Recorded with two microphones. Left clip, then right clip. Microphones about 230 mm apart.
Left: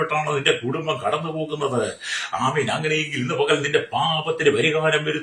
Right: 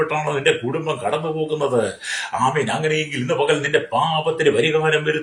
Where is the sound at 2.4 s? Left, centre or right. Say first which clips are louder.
Right 4 dB; centre.